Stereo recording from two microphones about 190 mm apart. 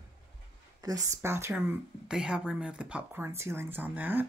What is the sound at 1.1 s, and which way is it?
Speech, 15° right (ahead or behind).